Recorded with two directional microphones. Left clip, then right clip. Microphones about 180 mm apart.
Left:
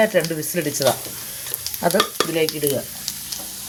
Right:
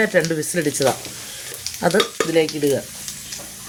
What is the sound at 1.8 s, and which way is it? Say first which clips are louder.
Speech: right 1 dB; 40° right (ahead or behind).